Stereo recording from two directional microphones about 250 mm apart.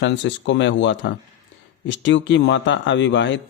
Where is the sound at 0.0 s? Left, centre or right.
Left.